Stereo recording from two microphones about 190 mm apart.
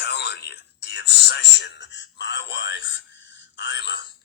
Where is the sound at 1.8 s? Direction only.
70° left (ahead or behind).